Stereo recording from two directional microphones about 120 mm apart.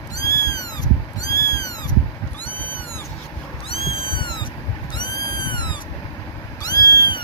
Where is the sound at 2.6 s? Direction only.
15° left (ahead or behind).